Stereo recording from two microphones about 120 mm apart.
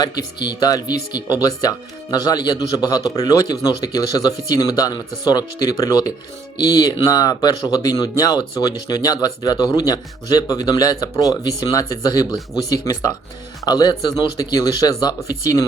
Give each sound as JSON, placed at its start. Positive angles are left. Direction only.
{"t": 0.0, "sound": "speech", "side_deg": 35}